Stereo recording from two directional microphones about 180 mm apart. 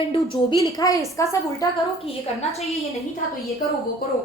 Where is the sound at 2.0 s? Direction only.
35° left (ahead or behind).